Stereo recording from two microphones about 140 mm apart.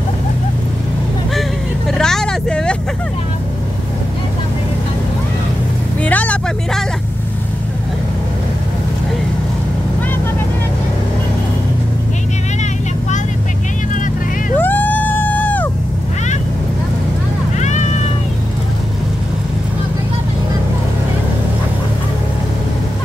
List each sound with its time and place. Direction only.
1.9 s vehicle: 5° left (ahead or behind)
6.0 s vehicle: 10° left (ahead or behind)
14.6 s vehicle: 15° left (ahead or behind)
17.6 s cat: 55° left (ahead or behind)